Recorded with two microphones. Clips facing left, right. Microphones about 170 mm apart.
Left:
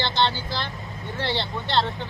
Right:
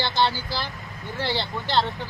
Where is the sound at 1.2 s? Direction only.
Centre (ahead or behind).